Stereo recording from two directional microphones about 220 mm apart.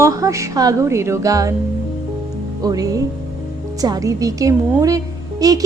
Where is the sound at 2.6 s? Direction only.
15° right (ahead or behind).